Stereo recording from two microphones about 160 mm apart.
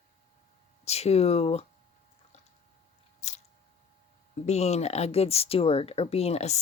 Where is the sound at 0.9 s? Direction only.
40° left (ahead or behind).